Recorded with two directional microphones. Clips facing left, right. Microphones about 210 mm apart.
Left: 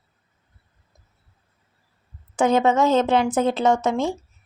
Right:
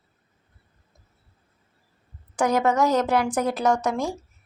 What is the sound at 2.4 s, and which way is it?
Speech, 25° left (ahead or behind).